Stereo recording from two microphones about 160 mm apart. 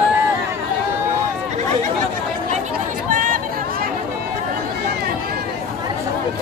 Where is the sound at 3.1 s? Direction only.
55° right (ahead or behind).